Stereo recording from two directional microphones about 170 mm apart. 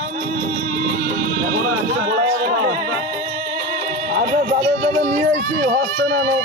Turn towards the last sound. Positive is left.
turn(degrees=-90)